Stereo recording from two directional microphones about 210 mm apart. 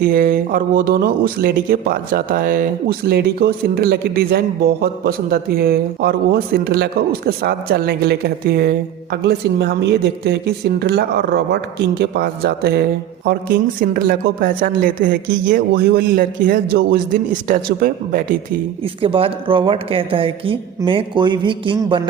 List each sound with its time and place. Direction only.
0.0 s speech: 40° right (ahead or behind)
19.0 s a woman's voice: 25° right (ahead or behind)